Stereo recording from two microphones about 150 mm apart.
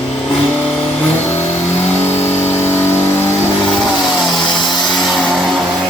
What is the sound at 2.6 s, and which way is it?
Vehicle, 15° left (ahead or behind).